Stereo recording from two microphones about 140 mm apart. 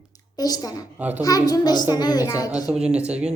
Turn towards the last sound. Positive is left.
turn(degrees=-5)  # may be behind; listen again after turning